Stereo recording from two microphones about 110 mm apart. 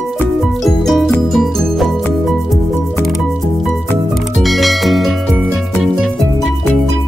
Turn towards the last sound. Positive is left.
turn(degrees=0)  # may be behind; listen again after turning